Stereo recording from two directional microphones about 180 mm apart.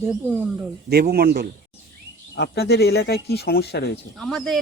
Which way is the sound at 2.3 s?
70° left (ahead or behind).